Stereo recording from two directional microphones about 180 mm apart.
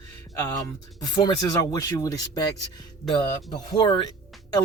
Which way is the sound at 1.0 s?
20° left (ahead or behind).